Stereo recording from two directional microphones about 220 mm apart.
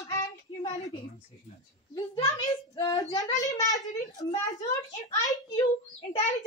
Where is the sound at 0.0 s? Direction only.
15° left (ahead or behind).